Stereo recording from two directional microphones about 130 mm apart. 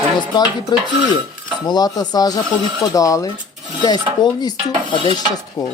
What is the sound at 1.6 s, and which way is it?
Speech, 30° left (ahead or behind).